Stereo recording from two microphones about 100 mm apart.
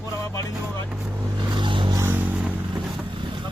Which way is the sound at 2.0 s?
15° right (ahead or behind).